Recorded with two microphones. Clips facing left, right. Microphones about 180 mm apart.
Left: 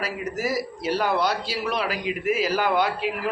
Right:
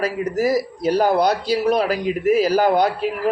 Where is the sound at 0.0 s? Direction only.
40° right (ahead or behind).